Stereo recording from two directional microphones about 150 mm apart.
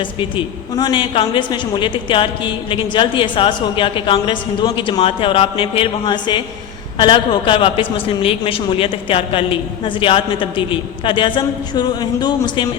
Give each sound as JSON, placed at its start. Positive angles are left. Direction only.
{"t": 0.0, "sound": "a woman's voice", "side_deg": 35}